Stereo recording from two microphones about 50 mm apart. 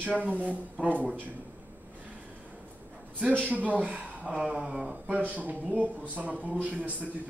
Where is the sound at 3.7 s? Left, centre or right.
Right.